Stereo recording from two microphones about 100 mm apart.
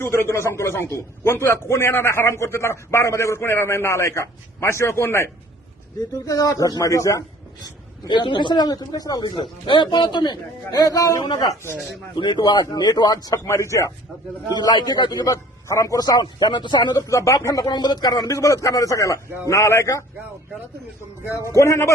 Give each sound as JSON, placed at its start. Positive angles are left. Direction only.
{"t": 0.0, "sound": "a man's voice", "side_deg": 25}
{"t": 8.0, "sound": "a man's voice", "side_deg": 50}
{"t": 12.1, "sound": "a man's voice", "side_deg": 50}
{"t": 13.5, "sound": "speech", "side_deg": 30}
{"t": 14.5, "sound": "a man's voice", "side_deg": 45}
{"t": 15.6, "sound": "a man's voice", "side_deg": 30}
{"t": 17.1, "sound": "a man's voice", "side_deg": 35}
{"t": 21.5, "sound": "a man's voice", "side_deg": 30}